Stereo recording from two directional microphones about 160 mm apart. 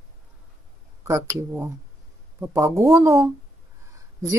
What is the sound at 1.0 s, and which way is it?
Speech, 15° right (ahead or behind).